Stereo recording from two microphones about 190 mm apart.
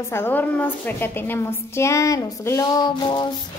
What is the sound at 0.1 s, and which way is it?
A woman's voice, 10° left (ahead or behind).